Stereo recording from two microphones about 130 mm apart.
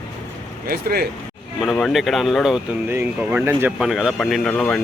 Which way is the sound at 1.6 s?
5° left (ahead or behind).